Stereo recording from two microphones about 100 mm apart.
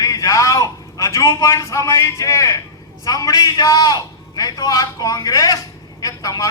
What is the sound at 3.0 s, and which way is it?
A man's voice, 35° left (ahead or behind).